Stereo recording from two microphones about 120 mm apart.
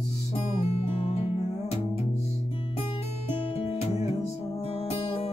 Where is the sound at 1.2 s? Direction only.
60° left (ahead or behind).